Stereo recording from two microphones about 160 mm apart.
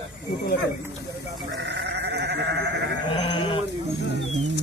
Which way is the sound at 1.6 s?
90° right.